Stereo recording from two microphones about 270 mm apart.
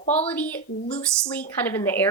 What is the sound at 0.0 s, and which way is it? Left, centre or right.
Speech, left.